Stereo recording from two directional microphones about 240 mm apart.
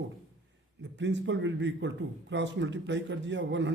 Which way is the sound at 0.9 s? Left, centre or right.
Right.